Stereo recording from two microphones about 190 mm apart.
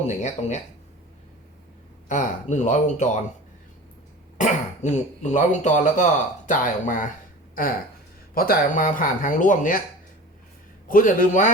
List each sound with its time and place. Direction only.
0.2 s speech: 35° left (ahead or behind)
2.0 s speech: 40° left (ahead or behind)
4.4 s speech: 40° left (ahead or behind)
8.4 s speech: 50° left (ahead or behind)
10.8 s speech: 45° left (ahead or behind)